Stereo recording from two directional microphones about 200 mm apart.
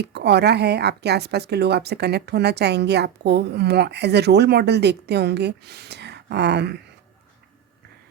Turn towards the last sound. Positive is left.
turn(degrees=-55)  # may be behind; listen again after turning